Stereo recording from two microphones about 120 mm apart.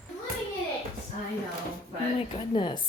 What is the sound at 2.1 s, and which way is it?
Speech, 45° left (ahead or behind).